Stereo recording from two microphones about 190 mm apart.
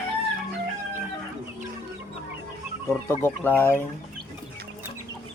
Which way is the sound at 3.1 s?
10° left (ahead or behind).